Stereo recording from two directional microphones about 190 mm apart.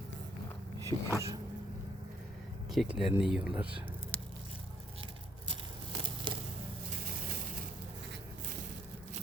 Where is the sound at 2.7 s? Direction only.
Centre (ahead or behind).